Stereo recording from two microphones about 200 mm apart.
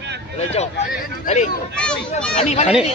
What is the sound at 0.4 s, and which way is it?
Speech, 30° left (ahead or behind).